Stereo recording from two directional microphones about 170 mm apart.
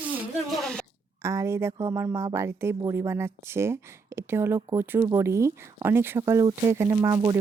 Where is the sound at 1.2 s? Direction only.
15° right (ahead or behind).